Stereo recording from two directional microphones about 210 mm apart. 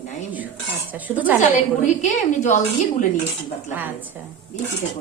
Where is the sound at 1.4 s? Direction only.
35° left (ahead or behind).